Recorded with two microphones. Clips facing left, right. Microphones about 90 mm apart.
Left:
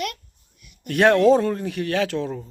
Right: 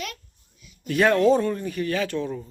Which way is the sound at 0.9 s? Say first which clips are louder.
Left 3 dB; 65° left (ahead or behind).